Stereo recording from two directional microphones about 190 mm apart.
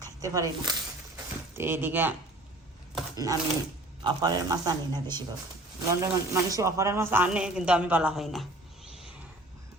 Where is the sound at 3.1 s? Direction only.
20° right (ahead or behind); by 8.4 s centre (ahead or behind).